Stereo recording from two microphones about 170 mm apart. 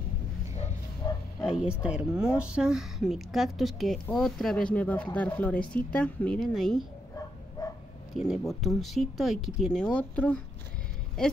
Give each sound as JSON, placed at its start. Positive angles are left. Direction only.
{"t": 1.0, "sound": "bow-wow", "side_deg": 25}
{"t": 1.4, "sound": "speech", "side_deg": -5}
{"t": 8.1, "sound": "speech", "side_deg": 0}